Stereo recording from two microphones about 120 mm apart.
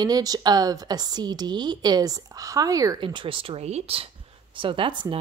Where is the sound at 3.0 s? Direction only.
45° right (ahead or behind).